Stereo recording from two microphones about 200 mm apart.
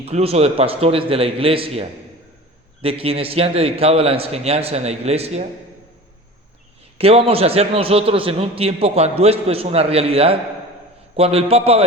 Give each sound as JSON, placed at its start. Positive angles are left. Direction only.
{"t": 0.0, "sound": "a man's voice", "side_deg": -30}
{"t": 7.0, "sound": "a man's voice", "side_deg": -30}